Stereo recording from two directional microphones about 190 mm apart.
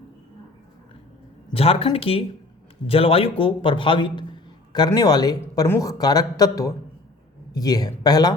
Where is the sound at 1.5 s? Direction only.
30° left (ahead or behind).